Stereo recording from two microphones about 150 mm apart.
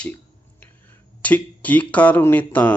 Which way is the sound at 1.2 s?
10° left (ahead or behind).